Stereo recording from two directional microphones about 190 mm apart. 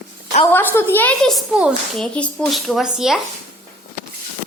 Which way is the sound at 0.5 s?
10° left (ahead or behind).